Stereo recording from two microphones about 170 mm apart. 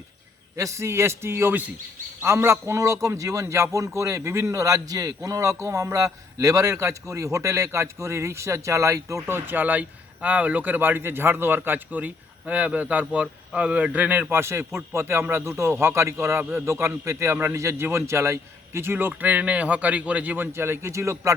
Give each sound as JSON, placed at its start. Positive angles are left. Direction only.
{"t": 0.5, "sound": "a man's voice", "side_deg": -15}